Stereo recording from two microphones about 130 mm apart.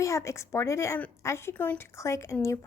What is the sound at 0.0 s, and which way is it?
A woman's voice, 20° left (ahead or behind).